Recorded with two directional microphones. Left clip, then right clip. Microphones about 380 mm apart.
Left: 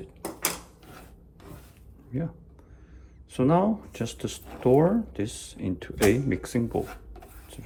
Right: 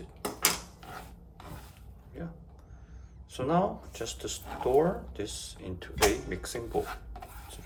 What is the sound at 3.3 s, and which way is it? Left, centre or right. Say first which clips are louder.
Speech: left 5 dB; centre.